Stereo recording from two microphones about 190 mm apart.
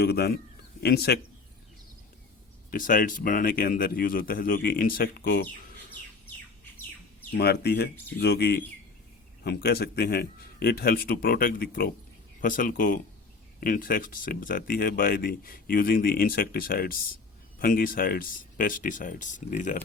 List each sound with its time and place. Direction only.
0.0 s speech: 55° left (ahead or behind)
2.6 s speech: 45° left (ahead or behind)
7.3 s speech: 55° left (ahead or behind)